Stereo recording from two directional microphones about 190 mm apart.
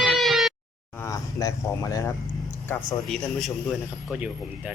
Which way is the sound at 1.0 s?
15° left (ahead or behind).